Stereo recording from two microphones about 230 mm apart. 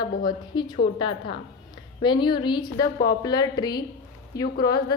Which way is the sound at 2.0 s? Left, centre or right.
Centre.